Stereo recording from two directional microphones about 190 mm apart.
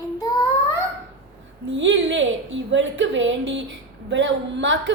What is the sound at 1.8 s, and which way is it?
A woman's voice, 75° right (ahead or behind).